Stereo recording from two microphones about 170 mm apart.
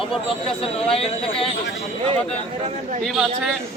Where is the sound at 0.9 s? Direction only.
35° left (ahead or behind).